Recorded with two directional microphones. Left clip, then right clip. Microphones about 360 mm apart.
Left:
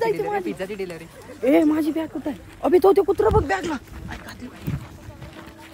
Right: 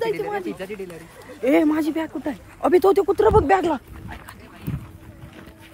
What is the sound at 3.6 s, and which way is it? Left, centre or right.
Speech, centre.